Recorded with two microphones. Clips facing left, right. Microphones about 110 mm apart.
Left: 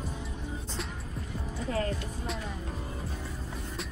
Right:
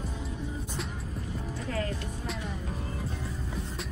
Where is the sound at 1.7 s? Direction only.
35° left (ahead or behind).